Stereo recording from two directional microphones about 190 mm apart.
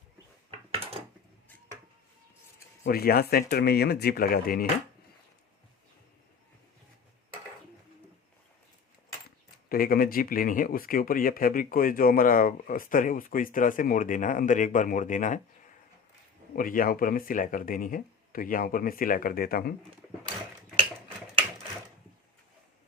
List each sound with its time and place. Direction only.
0.7 s a sound: 30° right (ahead or behind)
2.8 s speech: 50° left (ahead or behind)
9.6 s speech: 50° left (ahead or behind)
16.6 s speech: 45° left (ahead or behind)